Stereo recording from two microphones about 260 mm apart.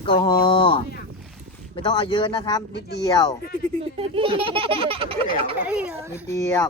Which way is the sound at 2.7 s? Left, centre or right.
Left.